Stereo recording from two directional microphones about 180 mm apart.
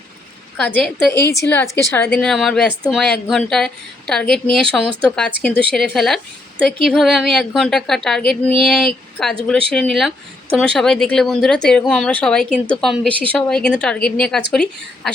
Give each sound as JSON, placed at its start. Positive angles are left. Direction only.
{"t": 0.5, "sound": "a woman's voice", "side_deg": 5}